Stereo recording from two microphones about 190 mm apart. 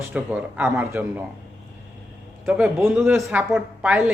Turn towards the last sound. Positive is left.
turn(degrees=-5)  # may be behind; listen again after turning